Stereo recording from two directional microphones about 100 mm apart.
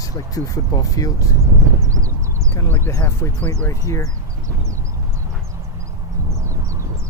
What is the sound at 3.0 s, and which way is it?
Speech, 30° left (ahead or behind).